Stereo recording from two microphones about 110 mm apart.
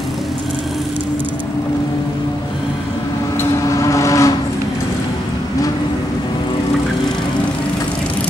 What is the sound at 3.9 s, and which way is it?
Vehicle, 30° left (ahead or behind).